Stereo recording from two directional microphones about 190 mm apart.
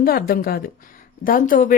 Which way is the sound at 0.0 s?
50° left (ahead or behind).